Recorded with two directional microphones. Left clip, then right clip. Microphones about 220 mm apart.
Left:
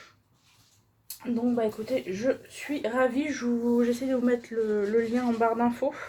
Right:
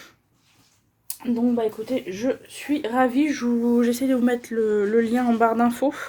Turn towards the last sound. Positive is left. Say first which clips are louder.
# right 5 dB
turn(degrees=-50)  # may be behind; listen again after turning